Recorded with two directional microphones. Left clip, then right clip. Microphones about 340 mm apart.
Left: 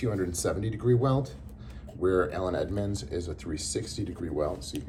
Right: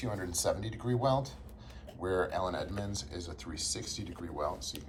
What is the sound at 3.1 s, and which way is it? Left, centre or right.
Speech, right.